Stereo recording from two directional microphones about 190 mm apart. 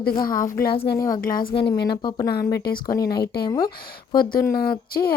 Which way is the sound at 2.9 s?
20° left (ahead or behind).